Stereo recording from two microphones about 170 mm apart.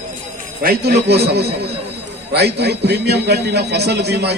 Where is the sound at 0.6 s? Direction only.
70° right (ahead or behind).